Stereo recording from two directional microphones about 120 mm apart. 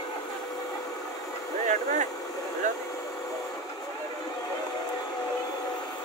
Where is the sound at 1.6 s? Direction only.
90° right.